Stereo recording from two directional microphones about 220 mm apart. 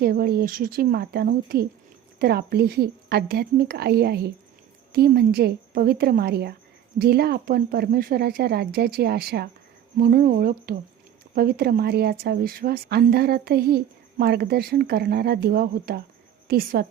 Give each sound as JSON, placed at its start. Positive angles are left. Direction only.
{"t": 0.0, "sound": "a woman's voice", "side_deg": -45}